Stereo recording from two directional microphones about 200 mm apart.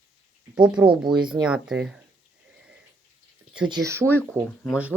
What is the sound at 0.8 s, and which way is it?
Speech, 20° right (ahead or behind).